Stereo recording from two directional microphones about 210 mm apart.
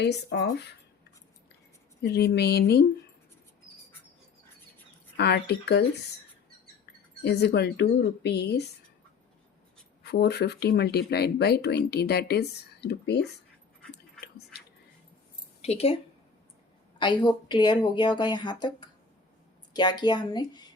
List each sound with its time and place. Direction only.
0.0 s speech: 55° left (ahead or behind)
2.0 s speech: 50° left (ahead or behind)
5.1 s speech: 50° left (ahead or behind)
7.2 s speech: 50° left (ahead or behind)
10.0 s speech: 50° left (ahead or behind)
15.6 s speech: 30° left (ahead or behind)
17.0 s speech: 20° left (ahead or behind)